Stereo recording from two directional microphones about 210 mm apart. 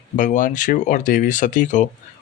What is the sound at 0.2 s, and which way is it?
Speech, 40° left (ahead or behind).